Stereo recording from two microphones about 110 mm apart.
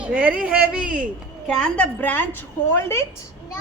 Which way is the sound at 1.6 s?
15° left (ahead or behind).